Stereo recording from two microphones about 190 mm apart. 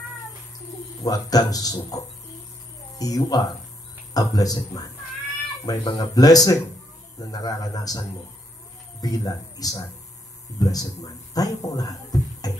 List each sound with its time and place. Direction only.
1.0 s speech: 20° left (ahead or behind)
9.0 s speech: 20° left (ahead or behind)